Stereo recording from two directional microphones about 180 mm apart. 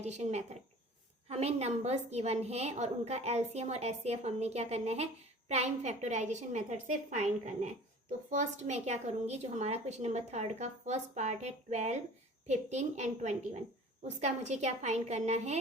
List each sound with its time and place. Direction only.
0.0 s a woman's voice: 40° right (ahead or behind)